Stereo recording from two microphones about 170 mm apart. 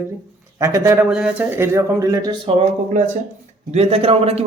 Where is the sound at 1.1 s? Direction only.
5° right (ahead or behind); by 2.5 s 20° right (ahead or behind).